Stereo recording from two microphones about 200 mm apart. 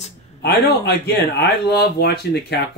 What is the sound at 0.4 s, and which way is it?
Speech, 55° left (ahead or behind).